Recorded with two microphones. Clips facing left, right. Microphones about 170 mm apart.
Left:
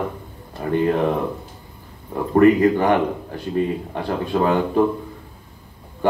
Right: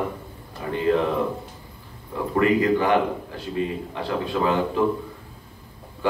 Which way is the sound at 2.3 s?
45° left (ahead or behind).